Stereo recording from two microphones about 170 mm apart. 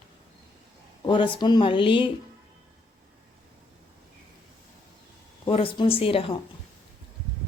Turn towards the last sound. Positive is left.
turn(degrees=35)  # may be behind; listen again after turning